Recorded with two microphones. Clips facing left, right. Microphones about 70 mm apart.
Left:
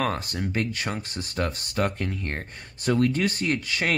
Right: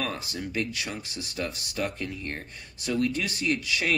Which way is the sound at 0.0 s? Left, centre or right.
Left.